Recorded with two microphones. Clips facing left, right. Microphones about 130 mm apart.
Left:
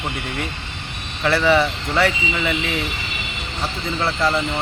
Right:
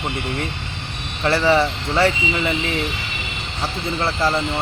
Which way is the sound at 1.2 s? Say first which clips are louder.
Even; 25° right (ahead or behind).